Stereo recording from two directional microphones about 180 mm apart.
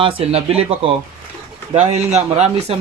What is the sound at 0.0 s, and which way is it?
Speech, 30° right (ahead or behind).